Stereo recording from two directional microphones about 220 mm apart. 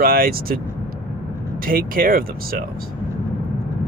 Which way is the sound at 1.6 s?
40° right (ahead or behind).